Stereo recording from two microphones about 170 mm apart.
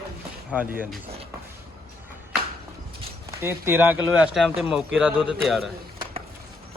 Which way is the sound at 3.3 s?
15° right (ahead or behind).